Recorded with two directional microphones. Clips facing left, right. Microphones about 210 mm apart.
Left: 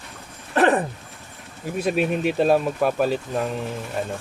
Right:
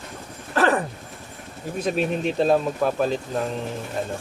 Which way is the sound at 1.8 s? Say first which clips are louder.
Left 2 dB; 5° left (ahead or behind).